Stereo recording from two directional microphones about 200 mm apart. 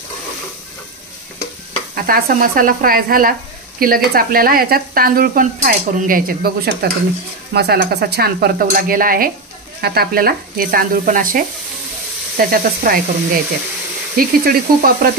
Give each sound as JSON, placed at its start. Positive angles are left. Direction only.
{"t": 2.0, "sound": "speech", "side_deg": -45}